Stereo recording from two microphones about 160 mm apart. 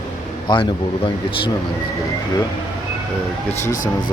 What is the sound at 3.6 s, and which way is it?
Speech, 55° left (ahead or behind).